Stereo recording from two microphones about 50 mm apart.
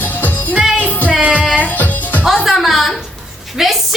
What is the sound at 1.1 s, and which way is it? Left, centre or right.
Music, right.